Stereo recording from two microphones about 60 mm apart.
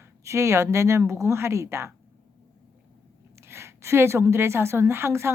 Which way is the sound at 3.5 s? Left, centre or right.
Right.